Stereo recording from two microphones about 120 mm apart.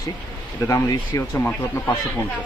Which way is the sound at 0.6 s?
25° left (ahead or behind).